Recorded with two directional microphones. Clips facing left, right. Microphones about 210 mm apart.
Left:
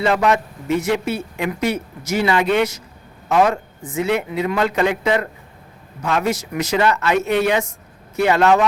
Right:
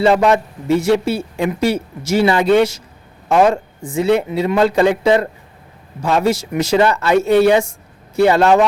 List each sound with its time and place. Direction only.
0.0 s speech: 30° right (ahead or behind)